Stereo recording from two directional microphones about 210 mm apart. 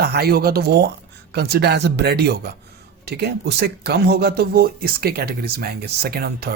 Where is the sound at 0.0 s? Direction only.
50° right (ahead or behind).